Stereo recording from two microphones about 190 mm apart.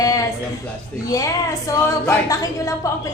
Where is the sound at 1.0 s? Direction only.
15° left (ahead or behind).